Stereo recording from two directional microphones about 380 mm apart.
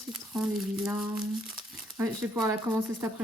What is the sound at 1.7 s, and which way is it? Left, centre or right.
Crumpling, right.